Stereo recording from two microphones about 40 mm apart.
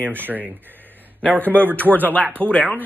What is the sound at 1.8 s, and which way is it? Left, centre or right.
Speech, left.